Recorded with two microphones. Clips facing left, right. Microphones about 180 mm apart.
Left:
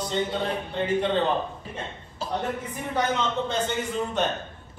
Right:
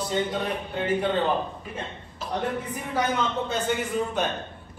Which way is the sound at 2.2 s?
30° left (ahead or behind).